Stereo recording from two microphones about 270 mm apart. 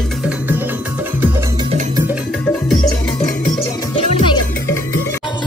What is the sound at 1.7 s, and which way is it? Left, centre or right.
Music, right.